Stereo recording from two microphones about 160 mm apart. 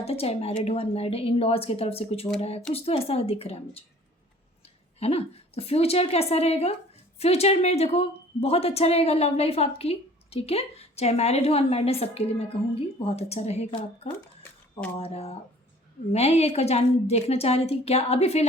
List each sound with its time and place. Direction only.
0.0 s a woman's voice: 40° left (ahead or behind)
4.9 s a woman's voice: 40° left (ahead or behind)